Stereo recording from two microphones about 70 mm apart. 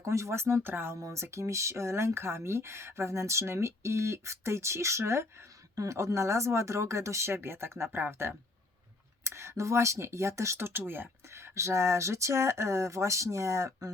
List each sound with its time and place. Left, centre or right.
0.0 s speech: right
9.2 s speech: right